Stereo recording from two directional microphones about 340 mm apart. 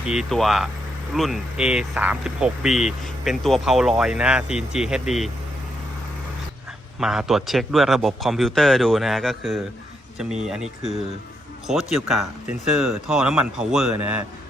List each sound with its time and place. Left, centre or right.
0.0 s speech: centre
7.0 s speech: centre